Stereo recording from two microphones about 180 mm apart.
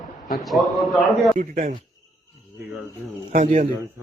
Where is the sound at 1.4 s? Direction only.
45° right (ahead or behind).